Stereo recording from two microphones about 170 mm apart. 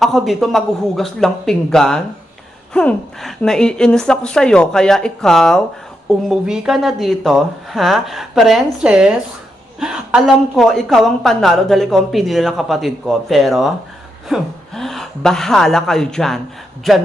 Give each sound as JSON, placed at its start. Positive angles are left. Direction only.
{"t": 0.0, "sound": "speech", "side_deg": 0}